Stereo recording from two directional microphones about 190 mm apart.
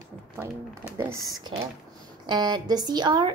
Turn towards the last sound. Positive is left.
turn(degrees=-25)  # may be behind; listen again after turning